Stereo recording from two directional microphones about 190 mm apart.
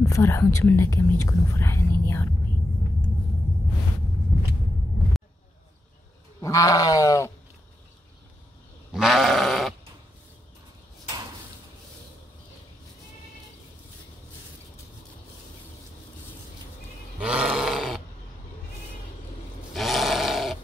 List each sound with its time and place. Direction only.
0.0 s speech: 15° left (ahead or behind)
6.4 s speech: 15° left (ahead or behind)
8.9 s sheep: centre (ahead or behind)
17.2 s roar: 5° right (ahead or behind)
19.7 s roar: centre (ahead or behind)